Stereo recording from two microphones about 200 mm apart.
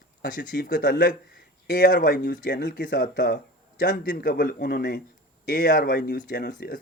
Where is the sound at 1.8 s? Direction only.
45° left (ahead or behind).